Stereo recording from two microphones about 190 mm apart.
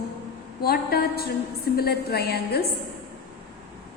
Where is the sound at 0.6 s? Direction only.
55° left (ahead or behind).